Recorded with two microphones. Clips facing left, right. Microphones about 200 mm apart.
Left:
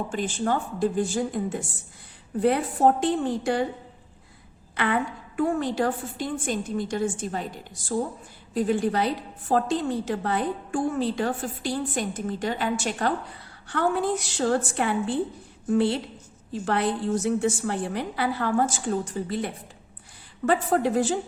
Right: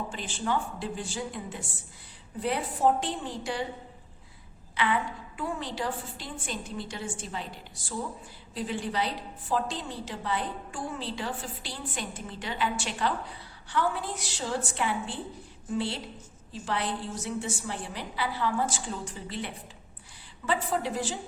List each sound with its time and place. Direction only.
0.1 s a woman's voice: 45° left (ahead or behind)
4.7 s a woman's voice: 50° left (ahead or behind)
8.5 s a woman's voice: 50° left (ahead or behind)